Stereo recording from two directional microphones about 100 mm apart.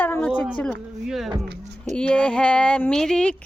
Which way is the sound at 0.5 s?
15° left (ahead or behind).